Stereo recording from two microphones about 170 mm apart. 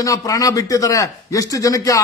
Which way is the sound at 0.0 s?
20° left (ahead or behind).